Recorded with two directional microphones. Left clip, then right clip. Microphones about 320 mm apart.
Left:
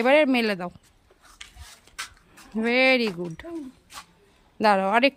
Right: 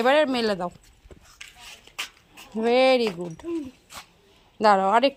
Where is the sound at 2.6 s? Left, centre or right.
Centre.